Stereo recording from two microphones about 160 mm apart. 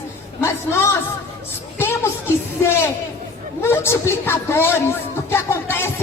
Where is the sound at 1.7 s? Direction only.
15° left (ahead or behind).